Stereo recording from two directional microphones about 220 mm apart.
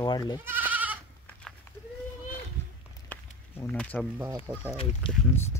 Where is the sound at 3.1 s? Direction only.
10° left (ahead or behind).